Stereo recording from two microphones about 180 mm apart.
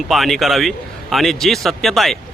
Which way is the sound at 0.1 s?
Centre (ahead or behind).